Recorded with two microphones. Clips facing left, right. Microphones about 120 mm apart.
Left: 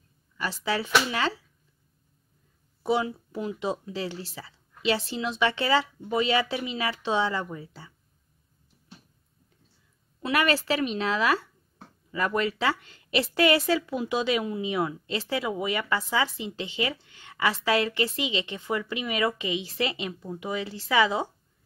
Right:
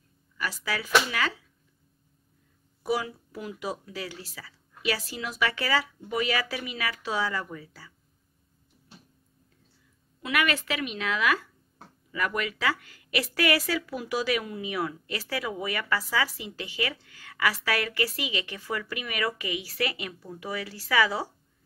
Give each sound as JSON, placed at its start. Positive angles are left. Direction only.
{"t": 0.7, "sound": "a woman's voice", "side_deg": 25}
{"t": 2.8, "sound": "a woman's voice", "side_deg": 25}
{"t": 10.2, "sound": "a woman's voice", "side_deg": 30}